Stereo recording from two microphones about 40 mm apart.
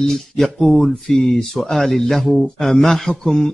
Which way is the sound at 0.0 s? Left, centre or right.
Centre.